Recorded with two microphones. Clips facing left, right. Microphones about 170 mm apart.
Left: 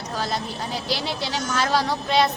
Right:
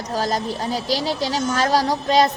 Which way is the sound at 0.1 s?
40° right (ahead or behind).